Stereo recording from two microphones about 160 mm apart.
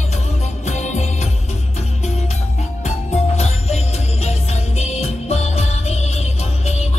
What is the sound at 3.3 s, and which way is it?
Music, 45° left (ahead or behind).